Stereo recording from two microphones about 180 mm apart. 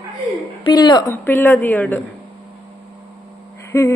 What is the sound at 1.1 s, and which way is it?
Speech, 10° left (ahead or behind).